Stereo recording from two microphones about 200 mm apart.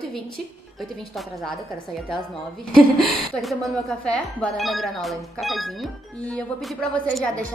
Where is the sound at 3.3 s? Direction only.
Centre (ahead or behind).